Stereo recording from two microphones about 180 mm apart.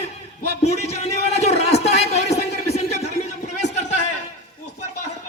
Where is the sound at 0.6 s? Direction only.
35° left (ahead or behind).